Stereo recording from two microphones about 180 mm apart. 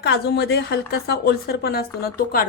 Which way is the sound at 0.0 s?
65° left (ahead or behind).